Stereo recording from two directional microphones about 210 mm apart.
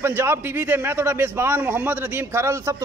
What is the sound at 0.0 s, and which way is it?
A man's voice, 10° right (ahead or behind).